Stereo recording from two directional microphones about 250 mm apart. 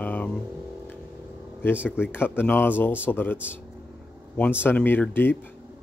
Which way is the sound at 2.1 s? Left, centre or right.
Centre.